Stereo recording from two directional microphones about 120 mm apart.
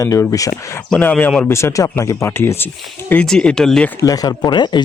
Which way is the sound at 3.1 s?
5° left (ahead or behind).